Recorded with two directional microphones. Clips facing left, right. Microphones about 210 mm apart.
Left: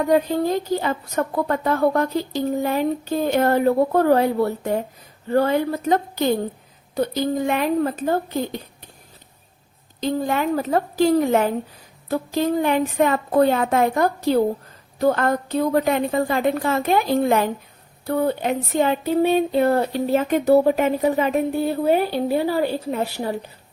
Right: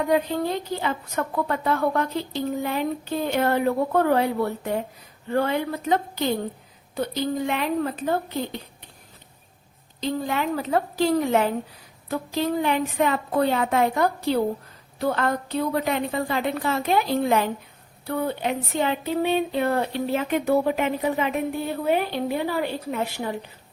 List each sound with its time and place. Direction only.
0.1 s a woman's voice: 45° left (ahead or behind)
10.0 s a woman's voice: 45° left (ahead or behind)